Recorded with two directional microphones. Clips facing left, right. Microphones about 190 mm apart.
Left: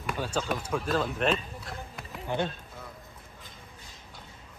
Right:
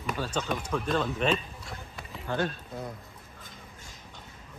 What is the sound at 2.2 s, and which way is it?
Speech, 20° left (ahead or behind).